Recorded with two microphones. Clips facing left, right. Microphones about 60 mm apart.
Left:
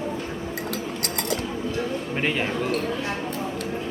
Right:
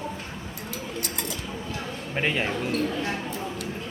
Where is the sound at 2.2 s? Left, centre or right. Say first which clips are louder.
Even; centre.